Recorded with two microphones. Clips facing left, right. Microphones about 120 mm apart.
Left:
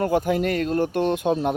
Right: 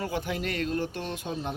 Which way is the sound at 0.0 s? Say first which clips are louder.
Left 10 dB; 45° left (ahead or behind).